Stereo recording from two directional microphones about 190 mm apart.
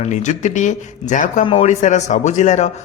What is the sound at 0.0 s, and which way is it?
Speech, 40° left (ahead or behind).